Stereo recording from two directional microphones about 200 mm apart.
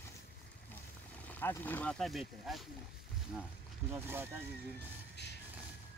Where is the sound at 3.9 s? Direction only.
10° right (ahead or behind).